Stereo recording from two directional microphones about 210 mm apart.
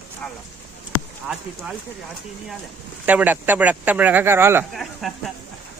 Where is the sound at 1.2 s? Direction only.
Centre (ahead or behind).